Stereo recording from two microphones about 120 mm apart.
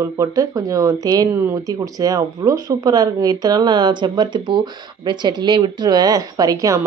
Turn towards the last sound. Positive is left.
turn(degrees=-30)  # may be behind; listen again after turning